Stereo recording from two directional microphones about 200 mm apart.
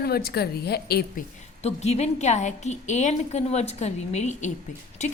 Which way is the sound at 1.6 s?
35° left (ahead or behind).